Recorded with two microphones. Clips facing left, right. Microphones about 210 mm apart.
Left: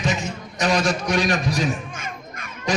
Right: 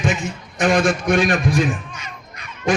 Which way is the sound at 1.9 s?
50° left (ahead or behind).